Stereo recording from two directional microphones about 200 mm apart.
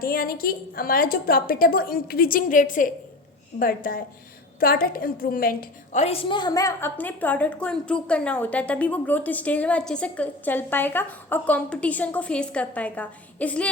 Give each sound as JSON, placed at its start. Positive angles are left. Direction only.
{"t": 0.0, "sound": "a woman's voice", "side_deg": 45}